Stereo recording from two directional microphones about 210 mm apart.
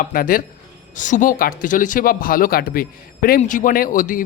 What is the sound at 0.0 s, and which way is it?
A man's voice, 40° left (ahead or behind).